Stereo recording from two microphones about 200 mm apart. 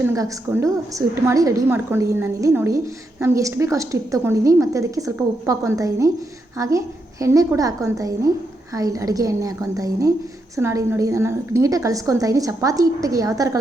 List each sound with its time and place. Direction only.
0.0 s a woman's voice: 15° right (ahead or behind)